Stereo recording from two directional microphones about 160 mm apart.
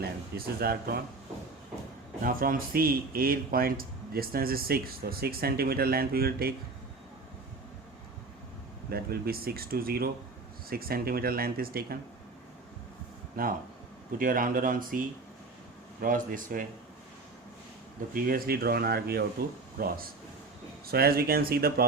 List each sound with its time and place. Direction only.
0.0 s speech: 75° right (ahead or behind)
2.2 s speech: 65° right (ahead or behind)
8.9 s speech: 70° right (ahead or behind)
13.4 s speech: 65° right (ahead or behind)
18.1 s speech: 65° right (ahead or behind); by 19.2 s 80° right
20.8 s speech: 70° right (ahead or behind)